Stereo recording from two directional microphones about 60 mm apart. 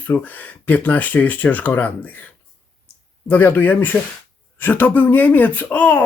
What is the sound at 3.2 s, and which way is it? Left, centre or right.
Speech, left.